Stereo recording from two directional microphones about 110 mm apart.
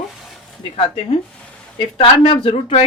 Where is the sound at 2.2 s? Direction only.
55° left (ahead or behind).